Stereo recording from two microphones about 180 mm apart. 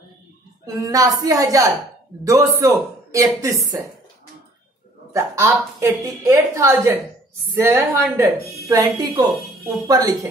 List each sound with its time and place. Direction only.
0.7 s a woman's voice: 20° right (ahead or behind)
5.1 s a woman's voice: 15° right (ahead or behind)